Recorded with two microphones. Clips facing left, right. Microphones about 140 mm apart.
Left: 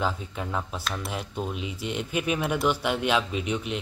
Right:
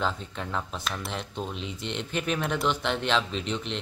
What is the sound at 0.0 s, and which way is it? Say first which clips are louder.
Speech: left 1 dB; 10° left (ahead or behind).